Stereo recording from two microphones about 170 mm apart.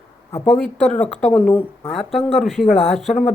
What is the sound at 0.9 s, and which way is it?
Speech, 5° left (ahead or behind).